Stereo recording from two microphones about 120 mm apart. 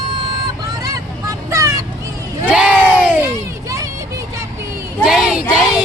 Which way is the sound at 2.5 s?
10° right (ahead or behind).